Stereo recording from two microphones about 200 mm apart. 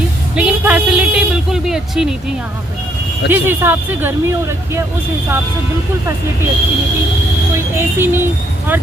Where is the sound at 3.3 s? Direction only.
10° right (ahead or behind).